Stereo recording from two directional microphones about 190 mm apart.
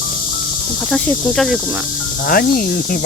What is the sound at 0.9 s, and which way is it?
Speech, 5° left (ahead or behind).